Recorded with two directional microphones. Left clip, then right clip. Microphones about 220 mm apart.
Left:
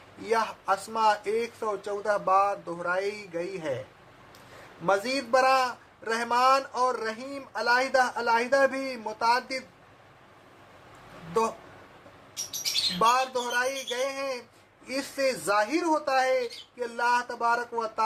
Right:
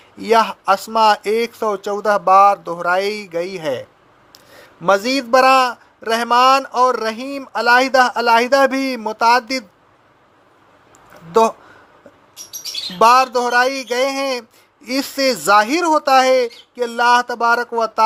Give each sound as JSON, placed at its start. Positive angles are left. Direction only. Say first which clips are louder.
{"t": 0.3, "sound": "a man's voice", "louder": "right 12 dB", "side_deg": -40}
{"t": 4.9, "sound": "a man's voice", "louder": "right 10 dB", "side_deg": -35}
{"t": 13.0, "sound": "speech", "louder": "right 14 dB", "side_deg": -45}